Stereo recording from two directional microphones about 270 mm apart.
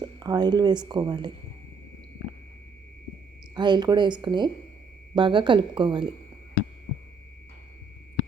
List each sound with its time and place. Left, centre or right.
0.0 s speech: centre
3.5 s speech: centre